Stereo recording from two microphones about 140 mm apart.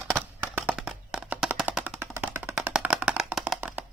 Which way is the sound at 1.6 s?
10° right (ahead or behind).